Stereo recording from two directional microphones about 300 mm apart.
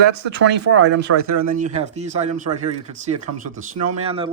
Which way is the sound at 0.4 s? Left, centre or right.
Right.